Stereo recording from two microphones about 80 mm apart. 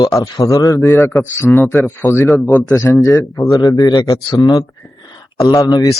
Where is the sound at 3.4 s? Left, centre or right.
Left.